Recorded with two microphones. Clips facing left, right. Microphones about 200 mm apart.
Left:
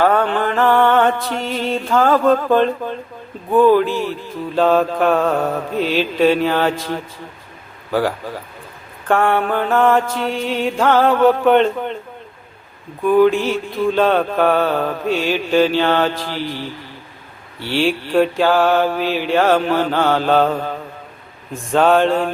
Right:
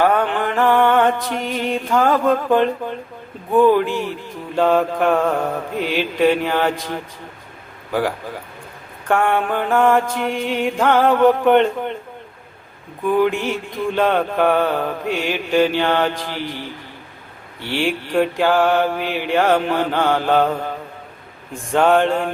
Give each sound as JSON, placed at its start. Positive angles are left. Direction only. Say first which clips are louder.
{"t": 0.0, "sound": "mantra", "louder": "left 2 dB", "side_deg": -15}
{"t": 9.0, "sound": "mantra", "louder": "left 2 dB", "side_deg": -15}
{"t": 13.3, "sound": "mantra", "louder": "left 4 dB", "side_deg": -15}
{"t": 21.5, "sound": "mantra", "louder": "left 1 dB", "side_deg": -15}